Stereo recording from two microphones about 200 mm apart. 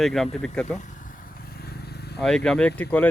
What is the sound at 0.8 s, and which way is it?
Vehicle, 40° left (ahead or behind).